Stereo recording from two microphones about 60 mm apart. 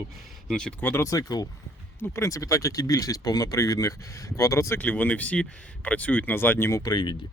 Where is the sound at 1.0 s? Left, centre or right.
Left.